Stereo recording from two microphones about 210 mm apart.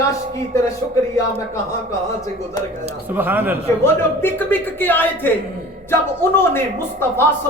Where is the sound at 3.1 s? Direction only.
10° right (ahead or behind).